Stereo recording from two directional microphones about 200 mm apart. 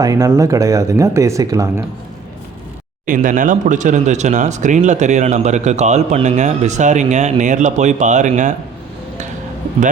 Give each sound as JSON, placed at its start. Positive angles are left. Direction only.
{"t": 0.0, "sound": "speech", "side_deg": -15}
{"t": 3.1, "sound": "speech", "side_deg": -40}